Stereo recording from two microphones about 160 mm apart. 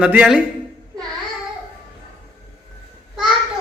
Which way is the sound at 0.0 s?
5° right (ahead or behind).